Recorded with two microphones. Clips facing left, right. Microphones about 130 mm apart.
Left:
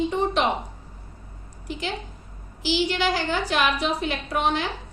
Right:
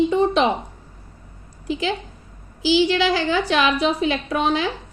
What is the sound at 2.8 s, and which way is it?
Speech, 90° right.